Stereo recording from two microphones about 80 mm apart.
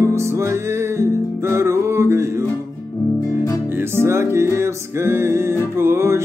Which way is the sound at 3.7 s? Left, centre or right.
Right.